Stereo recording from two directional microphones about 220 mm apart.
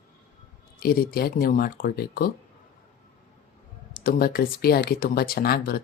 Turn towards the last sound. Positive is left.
turn(degrees=45)  # may be behind; listen again after turning